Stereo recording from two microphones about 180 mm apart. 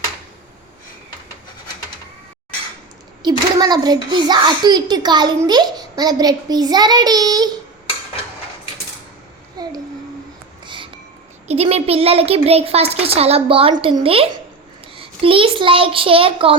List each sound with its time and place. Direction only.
3.2 s a child's voice: 20° right (ahead or behind)
9.6 s a child's voice: 20° right (ahead or behind)
10.7 s music: 30° right (ahead or behind)
11.4 s a child's voice: 35° right (ahead or behind)